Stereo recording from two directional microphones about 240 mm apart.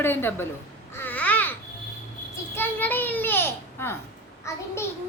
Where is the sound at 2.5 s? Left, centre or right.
Centre.